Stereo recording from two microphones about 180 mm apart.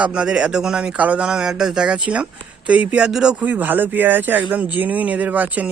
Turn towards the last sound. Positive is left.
turn(degrees=-10)  # may be behind; listen again after turning